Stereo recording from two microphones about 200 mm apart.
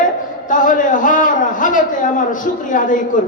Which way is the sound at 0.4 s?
40° left (ahead or behind).